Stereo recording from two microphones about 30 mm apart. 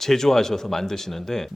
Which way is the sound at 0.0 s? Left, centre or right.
Centre.